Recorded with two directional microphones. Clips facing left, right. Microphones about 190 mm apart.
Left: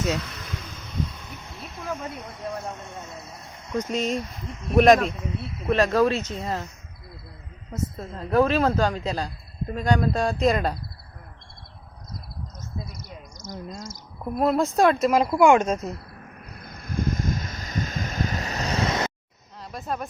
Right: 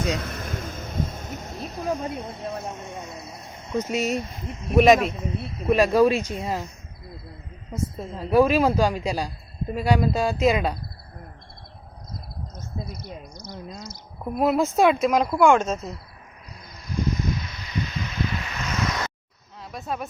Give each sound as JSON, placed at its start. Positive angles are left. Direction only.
{"t": 0.2, "sound": "vehicle", "side_deg": -50}
{"t": 4.8, "sound": "speech", "side_deg": -5}
{"t": 7.7, "sound": "speech", "side_deg": -10}
{"t": 12.9, "sound": "speech", "side_deg": 45}
{"t": 14.3, "sound": "speech", "side_deg": -5}
{"t": 15.4, "sound": "speech", "side_deg": 10}
{"t": 16.5, "sound": "a sound", "side_deg": 55}
{"t": 19.7, "sound": "speech", "side_deg": 0}